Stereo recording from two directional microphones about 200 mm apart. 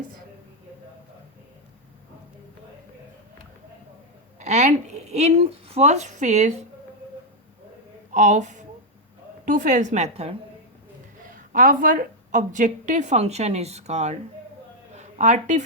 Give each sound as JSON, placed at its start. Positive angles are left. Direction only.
{"t": 4.4, "sound": "speech", "side_deg": -35}
{"t": 8.1, "sound": "a woman's voice", "side_deg": -35}
{"t": 11.3, "sound": "a woman's voice", "side_deg": -45}